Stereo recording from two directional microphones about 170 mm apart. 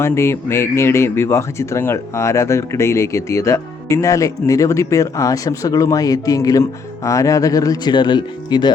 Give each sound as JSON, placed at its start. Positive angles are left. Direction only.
{"t": 0.0, "sound": "speech", "side_deg": 15}